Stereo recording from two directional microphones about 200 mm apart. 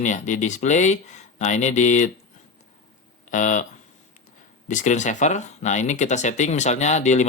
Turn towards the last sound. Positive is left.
turn(degrees=35)  # may be behind; listen again after turning